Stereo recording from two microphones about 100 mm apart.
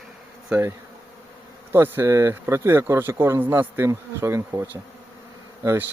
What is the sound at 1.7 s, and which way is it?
Speech, 25° right (ahead or behind).